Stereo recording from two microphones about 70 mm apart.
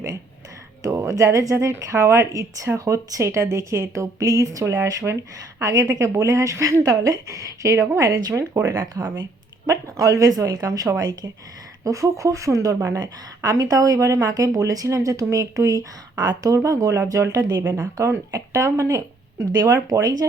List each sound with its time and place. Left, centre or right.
0.8 s speech: right
9.6 s speech: right
11.0 s speech: right
11.8 s speech: right
16.6 s speech: right
17.6 s speech: right
17.9 s speech: right
20.0 s speech: right